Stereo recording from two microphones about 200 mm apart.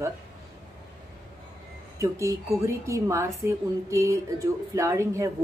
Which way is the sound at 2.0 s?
15° right (ahead or behind).